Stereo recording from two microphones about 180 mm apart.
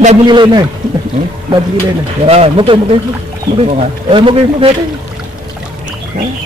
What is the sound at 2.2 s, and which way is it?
Speech, 35° right (ahead or behind).